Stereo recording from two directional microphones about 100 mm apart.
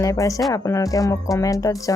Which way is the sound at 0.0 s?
35° left (ahead or behind).